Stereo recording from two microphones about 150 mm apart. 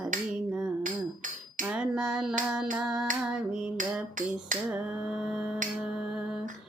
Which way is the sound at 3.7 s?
60° right (ahead or behind).